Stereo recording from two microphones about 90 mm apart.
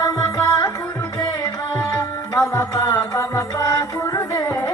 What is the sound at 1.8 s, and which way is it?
Music, 35° left (ahead or behind).